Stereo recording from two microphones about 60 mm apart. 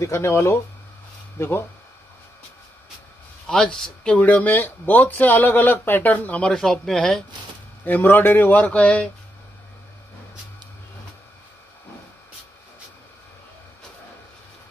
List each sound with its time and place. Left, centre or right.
0.0 s speech: left
3.4 s speech: centre
6.5 s speech: centre
7.8 s speech: left